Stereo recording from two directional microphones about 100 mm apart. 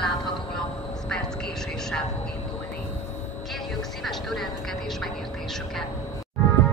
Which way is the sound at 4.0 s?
Centre (ahead or behind).